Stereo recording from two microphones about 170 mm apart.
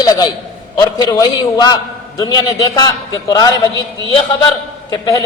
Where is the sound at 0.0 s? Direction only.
20° left (ahead or behind).